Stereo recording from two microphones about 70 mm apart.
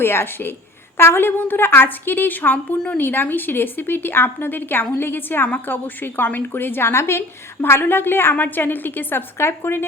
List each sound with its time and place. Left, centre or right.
0.0 s a woman's voice: left